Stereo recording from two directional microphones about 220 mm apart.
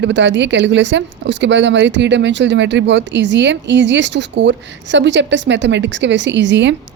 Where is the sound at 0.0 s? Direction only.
55° right (ahead or behind).